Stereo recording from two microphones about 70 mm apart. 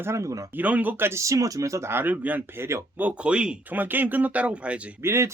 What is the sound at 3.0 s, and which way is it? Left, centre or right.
Speech, centre.